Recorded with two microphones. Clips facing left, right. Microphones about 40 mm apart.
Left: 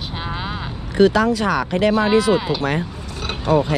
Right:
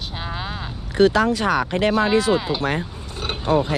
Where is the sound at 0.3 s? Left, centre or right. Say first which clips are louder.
Left 2 dB; centre.